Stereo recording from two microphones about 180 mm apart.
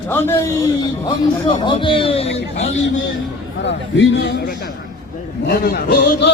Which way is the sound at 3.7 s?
80° left.